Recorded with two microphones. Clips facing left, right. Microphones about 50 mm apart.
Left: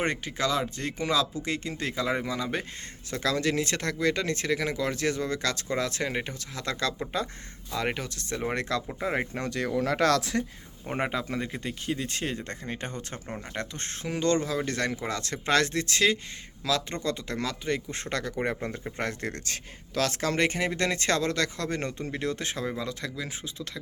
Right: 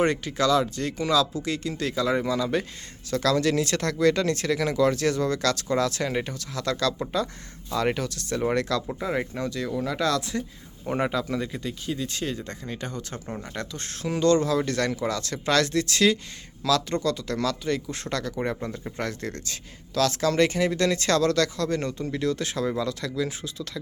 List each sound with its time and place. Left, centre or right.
0.0 s speech: centre
7.7 s speech: centre; by 9.4 s left
9.4 s speech: left
10.8 s speech: left